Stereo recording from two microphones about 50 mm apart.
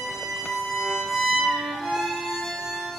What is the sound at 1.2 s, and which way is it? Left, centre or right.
Music, centre.